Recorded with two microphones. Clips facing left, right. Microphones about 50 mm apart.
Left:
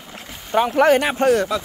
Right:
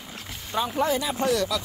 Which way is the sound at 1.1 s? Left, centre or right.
Left.